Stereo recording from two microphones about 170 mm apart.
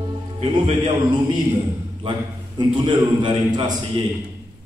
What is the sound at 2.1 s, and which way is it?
A man's voice, 25° right (ahead or behind).